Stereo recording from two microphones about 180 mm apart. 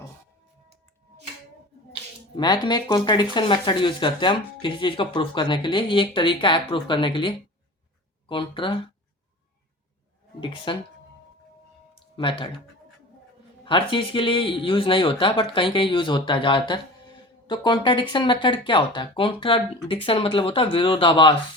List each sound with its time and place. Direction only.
2.3 s speech: 25° left (ahead or behind)
10.4 s speech: 30° left (ahead or behind)
12.1 s speech: 30° left (ahead or behind)
13.7 s speech: 30° left (ahead or behind)